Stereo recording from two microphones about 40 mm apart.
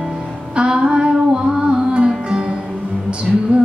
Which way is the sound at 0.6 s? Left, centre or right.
Right.